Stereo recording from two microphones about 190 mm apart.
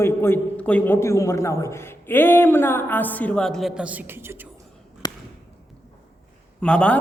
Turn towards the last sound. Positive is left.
turn(degrees=5)  # may be behind; listen again after turning